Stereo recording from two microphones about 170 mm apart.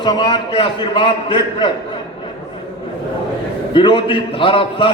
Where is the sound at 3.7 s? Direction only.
30° left (ahead or behind).